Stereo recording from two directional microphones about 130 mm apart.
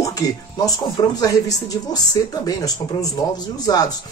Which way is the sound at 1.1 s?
30° left (ahead or behind).